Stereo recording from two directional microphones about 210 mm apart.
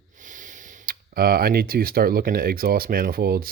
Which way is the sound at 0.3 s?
40° right (ahead or behind).